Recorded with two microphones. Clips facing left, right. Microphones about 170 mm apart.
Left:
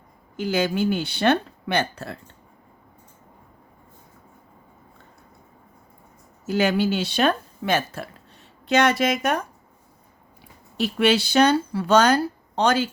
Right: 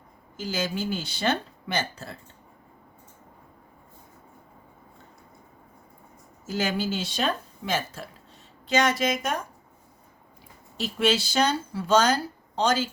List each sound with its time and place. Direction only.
0.3 s speech: 60° left (ahead or behind)
6.4 s speech: 65° left (ahead or behind)
10.8 s speech: 65° left (ahead or behind)